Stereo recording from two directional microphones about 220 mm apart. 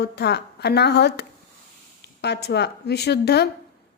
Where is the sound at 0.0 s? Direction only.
50° left (ahead or behind).